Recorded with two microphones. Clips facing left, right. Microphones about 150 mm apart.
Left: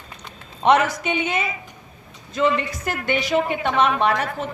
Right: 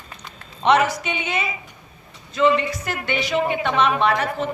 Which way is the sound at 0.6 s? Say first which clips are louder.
Left 1 dB; 45° left (ahead or behind).